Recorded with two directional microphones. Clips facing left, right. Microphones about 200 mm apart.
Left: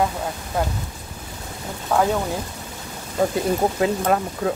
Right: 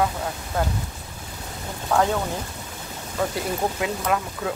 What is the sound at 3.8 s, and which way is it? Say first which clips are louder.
Speech: left 5 dB; 35° left (ahead or behind).